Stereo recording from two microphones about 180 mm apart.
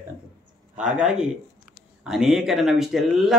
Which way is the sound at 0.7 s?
5° right (ahead or behind).